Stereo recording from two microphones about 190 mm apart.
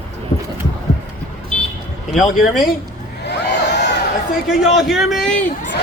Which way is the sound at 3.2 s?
65° left (ahead or behind).